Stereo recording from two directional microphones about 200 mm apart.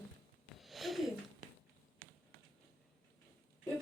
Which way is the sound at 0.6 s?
Centre (ahead or behind).